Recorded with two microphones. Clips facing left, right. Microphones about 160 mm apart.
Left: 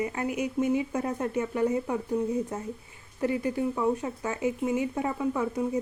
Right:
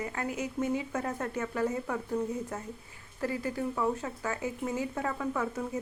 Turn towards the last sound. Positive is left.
turn(degrees=15)  # may be behind; listen again after turning